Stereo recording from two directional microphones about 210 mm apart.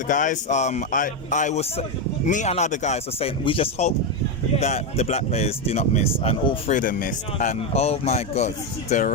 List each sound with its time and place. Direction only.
0.1 s speech: 35° left (ahead or behind)
6.7 s speech: 40° left (ahead or behind)